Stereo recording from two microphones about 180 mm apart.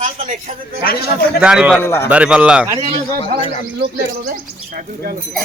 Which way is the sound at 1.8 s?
15° left (ahead or behind).